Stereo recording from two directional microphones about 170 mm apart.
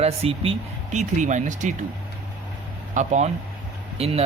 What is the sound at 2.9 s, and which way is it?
Speech, 45° right (ahead or behind).